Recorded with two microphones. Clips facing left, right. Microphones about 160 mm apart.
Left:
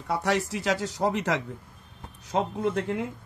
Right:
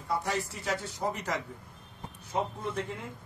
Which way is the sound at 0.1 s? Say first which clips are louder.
Left 5 dB; 80° left.